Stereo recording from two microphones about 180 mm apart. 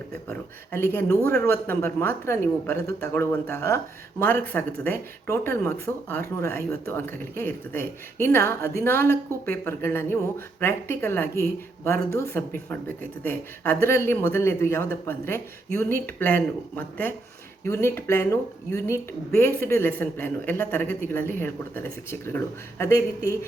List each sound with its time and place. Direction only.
0.3 s speech: 10° left (ahead or behind)